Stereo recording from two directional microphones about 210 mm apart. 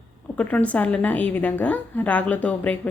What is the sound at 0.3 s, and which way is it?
A woman's voice, 5° left (ahead or behind).